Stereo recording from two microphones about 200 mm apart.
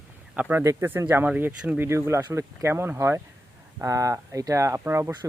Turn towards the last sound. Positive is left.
turn(degrees=-15)  # may be behind; listen again after turning